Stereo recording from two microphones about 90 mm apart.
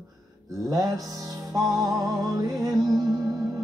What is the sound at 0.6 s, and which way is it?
Speech, 45° right (ahead or behind).